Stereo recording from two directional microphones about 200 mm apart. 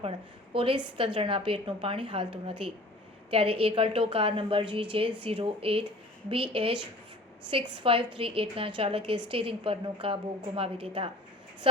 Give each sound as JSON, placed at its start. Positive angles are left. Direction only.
{"t": 0.5, "sound": "a woman's voice", "side_deg": -25}